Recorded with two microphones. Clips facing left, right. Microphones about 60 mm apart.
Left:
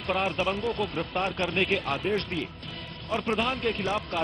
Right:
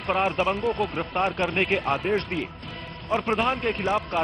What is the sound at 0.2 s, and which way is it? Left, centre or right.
Speech, right.